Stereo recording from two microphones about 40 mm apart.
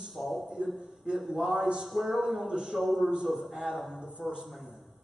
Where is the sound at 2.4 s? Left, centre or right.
Centre.